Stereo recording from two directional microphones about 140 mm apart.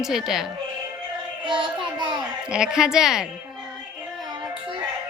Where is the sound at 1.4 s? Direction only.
35° right (ahead or behind).